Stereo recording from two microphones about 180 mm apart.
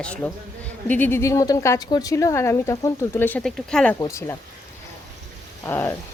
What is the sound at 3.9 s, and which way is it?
Speech, 15° left (ahead or behind).